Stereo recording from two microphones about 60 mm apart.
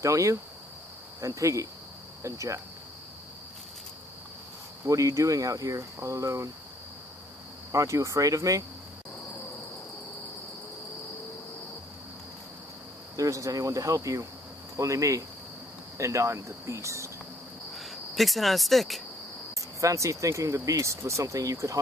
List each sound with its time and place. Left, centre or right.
0.0 s speech: right
4.8 s speech: right
7.7 s speech: right
13.1 s cricket: right
14.8 s speech: right
17.7 s speech: centre
19.8 s speech: right